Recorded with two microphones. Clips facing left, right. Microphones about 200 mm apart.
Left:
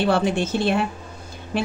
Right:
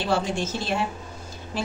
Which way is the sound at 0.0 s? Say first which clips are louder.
Left 5 dB; 60° left (ahead or behind).